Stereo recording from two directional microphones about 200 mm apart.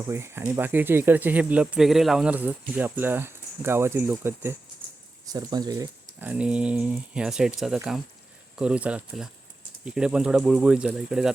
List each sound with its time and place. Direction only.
0.1 s speech: 10° right (ahead or behind)
6.1 s speech: 5° right (ahead or behind)